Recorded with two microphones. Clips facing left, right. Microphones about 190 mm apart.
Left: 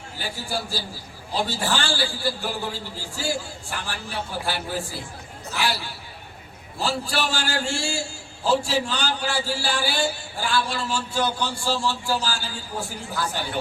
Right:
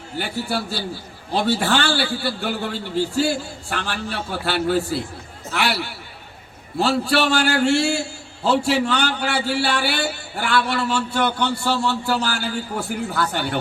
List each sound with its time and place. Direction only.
0.2 s a man's voice: 65° right (ahead or behind)